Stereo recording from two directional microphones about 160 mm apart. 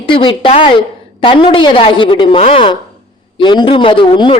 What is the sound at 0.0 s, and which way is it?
Speech, 35° left (ahead or behind).